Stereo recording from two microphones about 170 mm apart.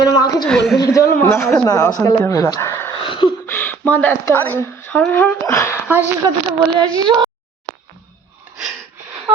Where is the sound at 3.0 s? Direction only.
30° left (ahead or behind).